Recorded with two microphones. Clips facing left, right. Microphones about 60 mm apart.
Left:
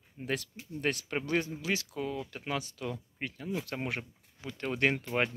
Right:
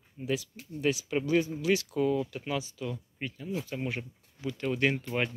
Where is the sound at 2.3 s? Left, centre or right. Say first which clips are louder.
Right 2 dB; left.